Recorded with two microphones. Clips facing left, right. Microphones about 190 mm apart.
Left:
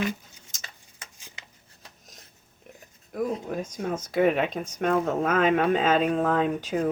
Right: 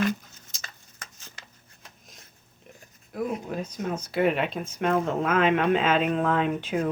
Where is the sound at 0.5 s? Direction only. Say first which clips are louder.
Right 1 dB; 50° left (ahead or behind).